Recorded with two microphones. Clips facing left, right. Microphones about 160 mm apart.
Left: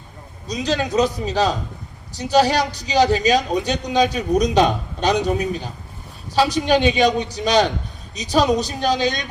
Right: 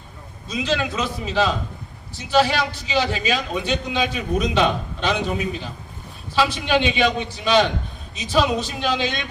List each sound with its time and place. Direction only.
0.4 s a man's voice: 40° left (ahead or behind)